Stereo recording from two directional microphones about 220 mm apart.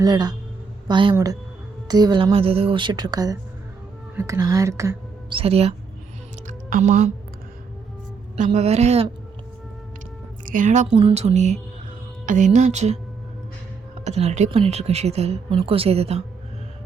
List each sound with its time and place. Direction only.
0.0 s a woman's voice: 20° right (ahead or behind)
5.4 s speech: 25° right (ahead or behind)
6.5 s music: 35° right (ahead or behind)
8.4 s speech: 30° right (ahead or behind)
10.4 s a woman's voice: 35° right (ahead or behind)
14.0 s speech: 30° right (ahead or behind)